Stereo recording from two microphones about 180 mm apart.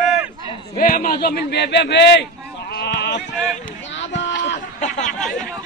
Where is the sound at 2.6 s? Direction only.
65° left (ahead or behind).